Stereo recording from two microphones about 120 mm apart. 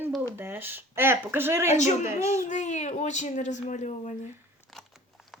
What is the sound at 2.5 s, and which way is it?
Speech, 80° left.